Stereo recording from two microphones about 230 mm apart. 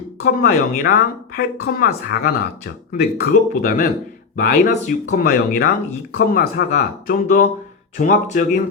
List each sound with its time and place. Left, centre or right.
0.3 s speech: left